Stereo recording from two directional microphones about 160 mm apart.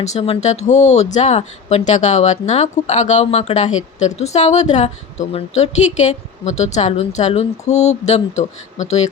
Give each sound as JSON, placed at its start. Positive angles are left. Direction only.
{"t": 0.0, "sound": "speech", "side_deg": 40}